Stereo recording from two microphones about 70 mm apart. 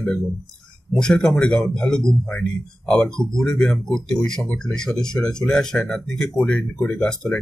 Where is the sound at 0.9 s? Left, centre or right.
Centre.